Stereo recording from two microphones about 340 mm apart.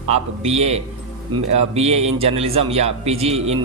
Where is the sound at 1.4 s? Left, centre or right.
Right.